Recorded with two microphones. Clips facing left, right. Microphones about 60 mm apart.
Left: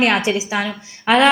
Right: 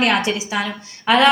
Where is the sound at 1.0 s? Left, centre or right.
Left.